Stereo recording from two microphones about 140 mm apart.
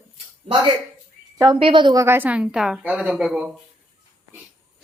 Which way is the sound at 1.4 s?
35° right (ahead or behind).